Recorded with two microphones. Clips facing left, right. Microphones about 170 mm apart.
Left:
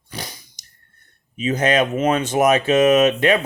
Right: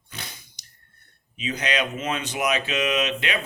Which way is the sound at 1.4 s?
50° left (ahead or behind).